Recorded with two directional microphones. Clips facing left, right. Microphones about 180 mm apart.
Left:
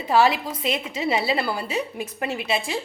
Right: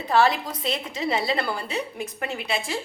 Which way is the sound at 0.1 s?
10° left (ahead or behind).